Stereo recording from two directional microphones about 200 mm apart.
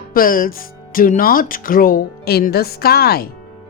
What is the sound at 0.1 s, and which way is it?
Speech, 45° left (ahead or behind).